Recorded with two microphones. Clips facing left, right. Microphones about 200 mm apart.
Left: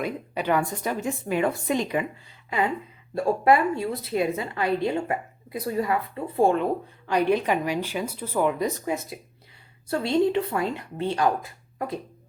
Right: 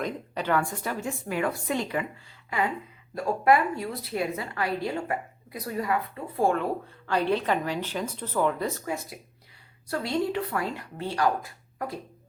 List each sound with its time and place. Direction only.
0.0 s a woman's voice: 15° left (ahead or behind)